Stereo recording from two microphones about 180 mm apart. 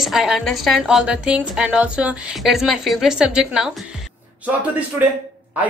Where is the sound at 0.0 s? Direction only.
Centre (ahead or behind).